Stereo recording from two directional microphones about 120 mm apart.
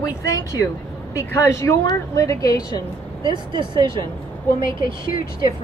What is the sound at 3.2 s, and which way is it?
Speech, 40° right (ahead or behind).